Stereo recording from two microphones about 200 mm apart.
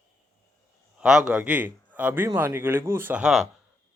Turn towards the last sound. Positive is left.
turn(degrees=-5)  # may be behind; listen again after turning